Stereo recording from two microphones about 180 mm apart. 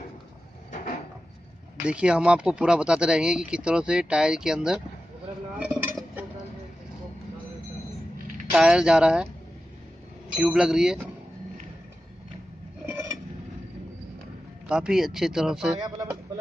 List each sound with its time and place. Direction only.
1.8 s speech: 5° right (ahead or behind)
5.6 s dishes: 5° right (ahead or behind)
8.5 s speech: 5° right (ahead or behind)
10.3 s speech: 5° right (ahead or behind)
14.7 s speech: 5° right (ahead or behind)
15.8 s a sound: 20° right (ahead or behind)